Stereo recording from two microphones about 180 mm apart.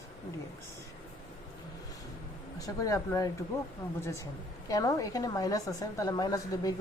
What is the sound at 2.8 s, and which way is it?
A woman's voice, 15° left (ahead or behind).